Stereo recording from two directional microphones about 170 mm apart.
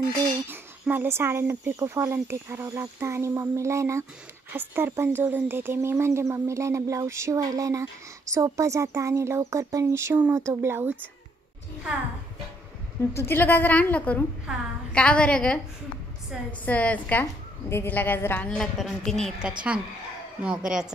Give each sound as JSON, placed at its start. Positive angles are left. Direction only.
{"t": 0.5, "sound": "speech", "side_deg": -10}
{"t": 13.1, "sound": "a woman's voice", "side_deg": 15}
{"t": 14.5, "sound": "a woman's voice", "side_deg": -5}